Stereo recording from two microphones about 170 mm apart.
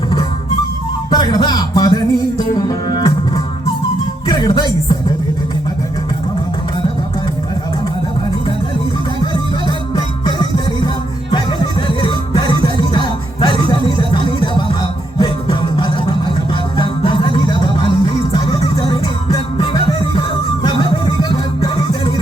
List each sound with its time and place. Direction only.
1.1 s music: 25° left (ahead or behind)
9.2 s music: 25° left (ahead or behind)
11.9 s music: 30° left (ahead or behind)